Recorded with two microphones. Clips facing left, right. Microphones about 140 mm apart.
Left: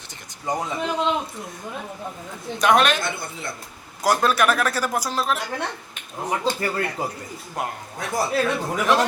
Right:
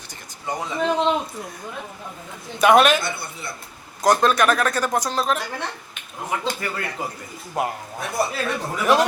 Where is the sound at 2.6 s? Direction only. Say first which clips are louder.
Right 4 dB; 5° right (ahead or behind).